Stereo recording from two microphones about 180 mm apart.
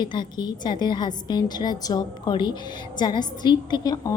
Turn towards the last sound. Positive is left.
turn(degrees=20)  # may be behind; listen again after turning